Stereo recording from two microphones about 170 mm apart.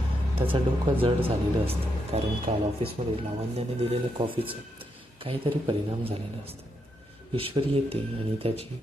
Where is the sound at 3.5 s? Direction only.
35° right (ahead or behind).